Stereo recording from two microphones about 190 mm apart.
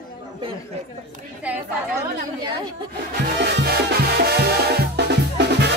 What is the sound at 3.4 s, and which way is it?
Music, 60° right (ahead or behind).